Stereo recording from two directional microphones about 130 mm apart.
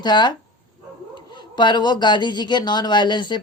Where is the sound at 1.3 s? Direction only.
35° left (ahead or behind).